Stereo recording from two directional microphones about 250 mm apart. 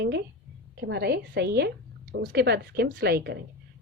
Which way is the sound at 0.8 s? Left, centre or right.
Right.